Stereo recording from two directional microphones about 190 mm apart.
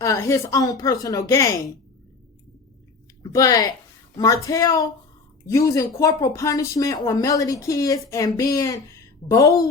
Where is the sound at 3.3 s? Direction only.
20° left (ahead or behind).